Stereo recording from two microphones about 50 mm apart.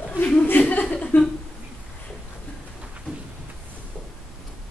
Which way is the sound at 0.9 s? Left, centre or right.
Left.